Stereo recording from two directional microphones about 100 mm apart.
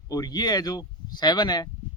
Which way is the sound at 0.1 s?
40° left (ahead or behind).